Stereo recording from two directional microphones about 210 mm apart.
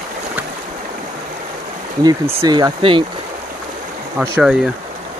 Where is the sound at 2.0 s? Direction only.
20° right (ahead or behind).